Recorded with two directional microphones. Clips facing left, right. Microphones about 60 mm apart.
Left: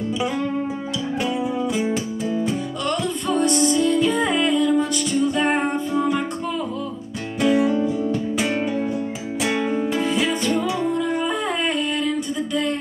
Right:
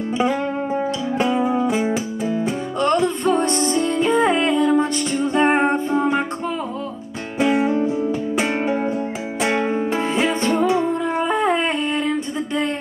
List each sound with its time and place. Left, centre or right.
0.2 s music: right
1.1 s music: right
1.9 s music: centre
2.4 s music: right
7.3 s music: right